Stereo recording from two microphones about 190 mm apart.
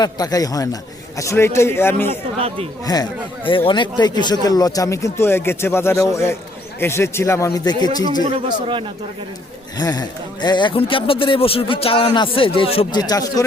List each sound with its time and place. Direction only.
0.0 s speech: 20° left (ahead or behind)
8.2 s a man's voice: 25° right (ahead or behind)
9.7 s speech: 20° left (ahead or behind)